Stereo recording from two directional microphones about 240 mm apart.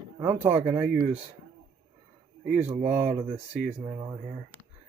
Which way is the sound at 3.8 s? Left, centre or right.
Centre.